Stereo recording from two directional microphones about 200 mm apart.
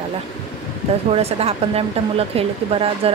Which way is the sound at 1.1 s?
30° right (ahead or behind).